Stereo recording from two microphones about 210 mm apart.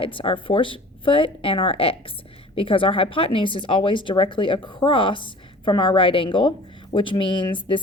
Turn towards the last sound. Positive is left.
turn(degrees=25)  # may be behind; listen again after turning